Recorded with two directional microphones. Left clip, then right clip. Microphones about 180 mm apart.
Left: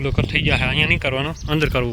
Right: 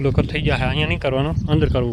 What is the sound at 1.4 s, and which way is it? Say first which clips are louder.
Speech: left 2 dB; 25° right (ahead or behind).